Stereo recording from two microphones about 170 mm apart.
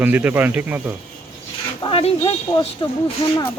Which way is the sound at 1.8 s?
30° left (ahead or behind).